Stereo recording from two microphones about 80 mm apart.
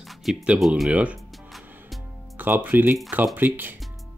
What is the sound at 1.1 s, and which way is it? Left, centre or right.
Music, centre.